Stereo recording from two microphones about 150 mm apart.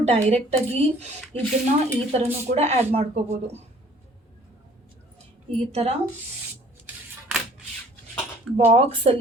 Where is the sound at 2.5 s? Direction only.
45° right (ahead or behind).